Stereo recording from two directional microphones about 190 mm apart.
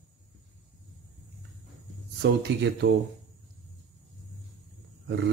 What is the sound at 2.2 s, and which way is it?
Speech, 60° right (ahead or behind).